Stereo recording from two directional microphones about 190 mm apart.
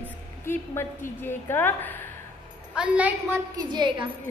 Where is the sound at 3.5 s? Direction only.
25° right (ahead or behind).